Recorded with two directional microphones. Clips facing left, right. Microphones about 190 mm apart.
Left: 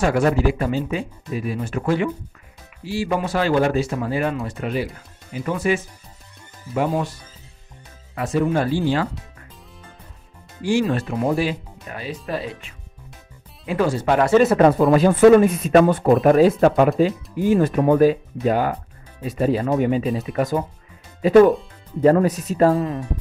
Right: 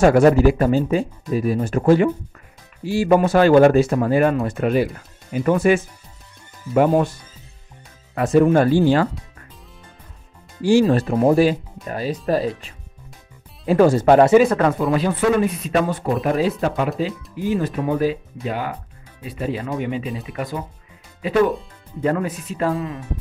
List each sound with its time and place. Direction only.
0.0 s speech: 45° right (ahead or behind)
8.1 s speech: 50° right (ahead or behind)
10.6 s speech: 35° right (ahead or behind)
14.8 s speech: 50° left (ahead or behind)